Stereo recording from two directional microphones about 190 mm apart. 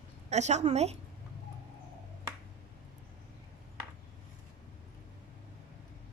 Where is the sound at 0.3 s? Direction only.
35° right (ahead or behind).